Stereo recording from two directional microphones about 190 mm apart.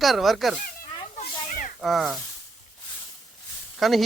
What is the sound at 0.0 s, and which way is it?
Speech, centre (ahead or behind).